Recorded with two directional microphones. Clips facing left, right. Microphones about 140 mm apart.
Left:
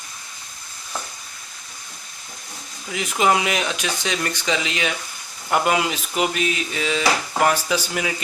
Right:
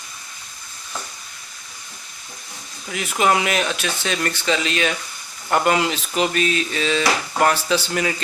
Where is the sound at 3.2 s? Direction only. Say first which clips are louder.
Right 1 dB; 15° left (ahead or behind).